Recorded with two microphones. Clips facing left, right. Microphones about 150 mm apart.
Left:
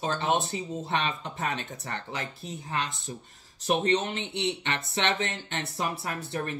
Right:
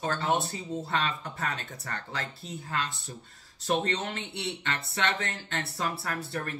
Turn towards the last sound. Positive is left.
turn(degrees=20)  # may be behind; listen again after turning